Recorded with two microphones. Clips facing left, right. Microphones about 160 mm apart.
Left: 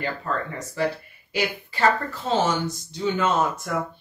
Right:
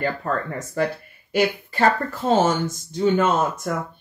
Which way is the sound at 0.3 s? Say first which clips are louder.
Right 3 dB; 50° right (ahead or behind).